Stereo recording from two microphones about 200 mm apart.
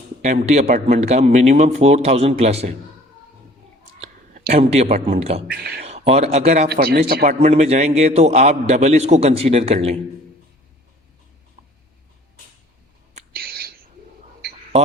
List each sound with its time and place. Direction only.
0.2 s a man's voice: 35° right (ahead or behind)
4.5 s a man's voice: 30° right (ahead or behind)
5.5 s speech: 50° right (ahead or behind)
5.8 s a man's voice: 30° right (ahead or behind)
6.7 s speech: 50° right (ahead or behind)
7.3 s a man's voice: 30° right (ahead or behind)
13.3 s a sound: 50° right (ahead or behind)